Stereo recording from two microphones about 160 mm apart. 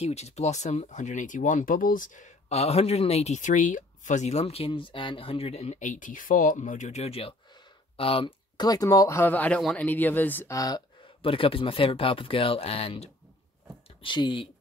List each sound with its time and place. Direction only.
0.0 s speech: 45° left (ahead or behind)